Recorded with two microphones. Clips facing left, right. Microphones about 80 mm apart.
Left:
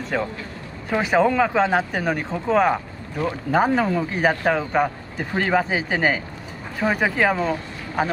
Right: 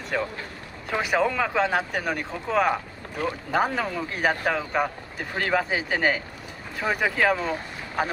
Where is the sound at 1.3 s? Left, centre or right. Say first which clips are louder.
Left 5 dB; centre.